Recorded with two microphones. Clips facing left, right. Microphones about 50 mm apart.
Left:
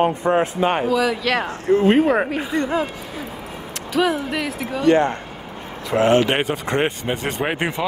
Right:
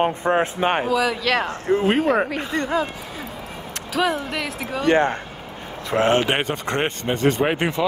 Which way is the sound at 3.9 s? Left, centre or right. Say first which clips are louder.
Left 2 dB; centre.